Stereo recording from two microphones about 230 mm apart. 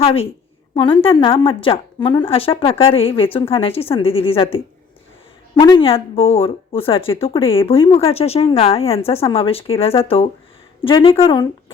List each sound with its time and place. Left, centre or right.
0.0 s a woman's voice: left
5.5 s a woman's voice: centre